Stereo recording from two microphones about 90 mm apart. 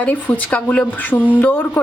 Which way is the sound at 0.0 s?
15° left (ahead or behind).